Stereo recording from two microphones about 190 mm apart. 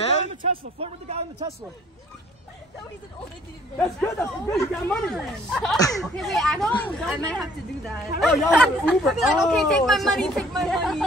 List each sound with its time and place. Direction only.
0.5 s a man's voice: 30° right (ahead or behind)
3.7 s a woman's voice: 10° left (ahead or behind)